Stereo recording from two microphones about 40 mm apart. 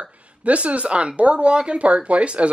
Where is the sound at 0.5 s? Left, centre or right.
Right.